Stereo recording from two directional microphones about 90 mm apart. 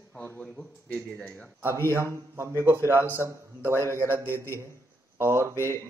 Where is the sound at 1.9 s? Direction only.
30° right (ahead or behind).